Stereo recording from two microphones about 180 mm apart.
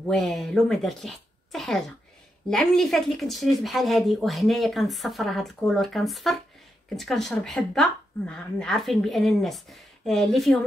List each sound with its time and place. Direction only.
0.0 s a woman's voice: centre (ahead or behind)